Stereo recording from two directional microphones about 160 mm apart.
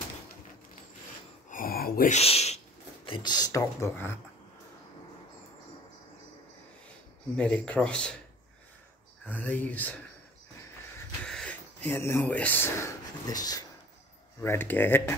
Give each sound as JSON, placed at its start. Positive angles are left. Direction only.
{"t": 1.5, "sound": "a sound", "side_deg": 65}
{"t": 2.0, "sound": "speech", "side_deg": 40}
{"t": 3.1, "sound": "speech", "side_deg": 25}
{"t": 7.3, "sound": "speech", "side_deg": 5}
{"t": 9.2, "sound": "speech", "side_deg": 10}
{"t": 11.2, "sound": "speech", "side_deg": 5}